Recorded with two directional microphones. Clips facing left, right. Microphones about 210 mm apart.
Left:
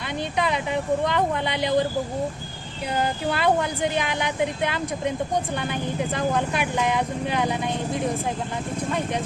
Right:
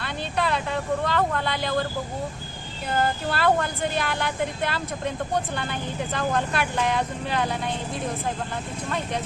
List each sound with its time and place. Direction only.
0.0 s a woman's voice: 15° left (ahead or behind)
2.9 s a woman's voice: 15° left (ahead or behind)